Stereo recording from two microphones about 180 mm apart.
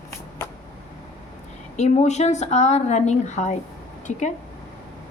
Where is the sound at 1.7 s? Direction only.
40° left (ahead or behind).